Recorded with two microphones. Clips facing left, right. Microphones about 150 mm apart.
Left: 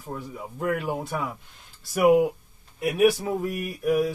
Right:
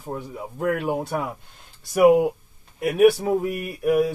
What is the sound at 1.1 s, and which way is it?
Speech, 45° right (ahead or behind).